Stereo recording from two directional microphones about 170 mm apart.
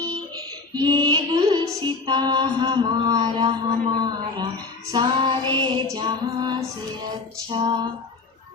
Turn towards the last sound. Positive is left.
turn(degrees=-25)  # may be behind; listen again after turning